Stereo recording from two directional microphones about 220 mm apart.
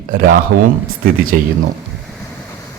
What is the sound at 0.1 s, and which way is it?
A man's voice, 40° right (ahead or behind).